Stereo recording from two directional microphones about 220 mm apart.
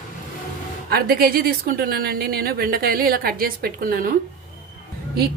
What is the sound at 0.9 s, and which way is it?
A woman's voice, 45° right (ahead or behind).